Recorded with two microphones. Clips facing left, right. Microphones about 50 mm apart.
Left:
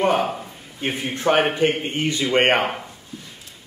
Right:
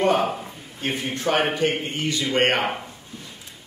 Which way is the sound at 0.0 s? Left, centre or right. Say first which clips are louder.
Left 1 dB; centre.